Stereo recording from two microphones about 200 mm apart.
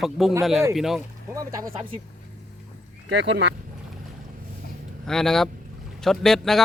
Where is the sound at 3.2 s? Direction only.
60° right (ahead or behind).